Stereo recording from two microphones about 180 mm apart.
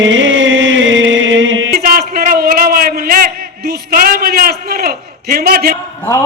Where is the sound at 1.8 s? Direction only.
55° right (ahead or behind).